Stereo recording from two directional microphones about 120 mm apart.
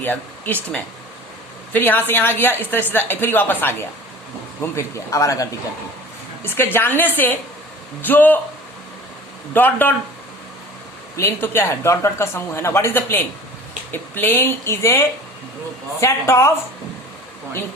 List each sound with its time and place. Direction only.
0.0 s speech: 15° left (ahead or behind)
1.7 s a woman's voice: 15° left (ahead or behind)
9.5 s a woman's voice: 15° left (ahead or behind)
11.2 s speech: 20° left (ahead or behind)